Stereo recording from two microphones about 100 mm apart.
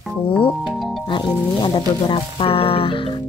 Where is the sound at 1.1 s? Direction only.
50° left (ahead or behind).